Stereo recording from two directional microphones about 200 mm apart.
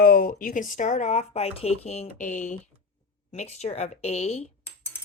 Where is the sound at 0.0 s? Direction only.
45° left (ahead or behind).